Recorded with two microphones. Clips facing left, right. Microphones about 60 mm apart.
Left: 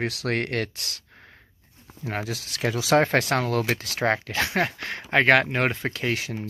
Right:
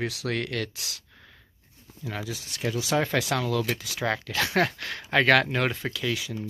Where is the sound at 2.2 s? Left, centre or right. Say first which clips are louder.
Left 3 dB; left.